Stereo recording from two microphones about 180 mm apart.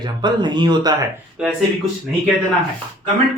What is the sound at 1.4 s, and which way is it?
Speech, 5° right (ahead or behind).